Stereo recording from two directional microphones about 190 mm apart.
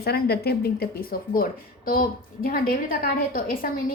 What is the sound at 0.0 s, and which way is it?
A woman's voice, 55° left (ahead or behind).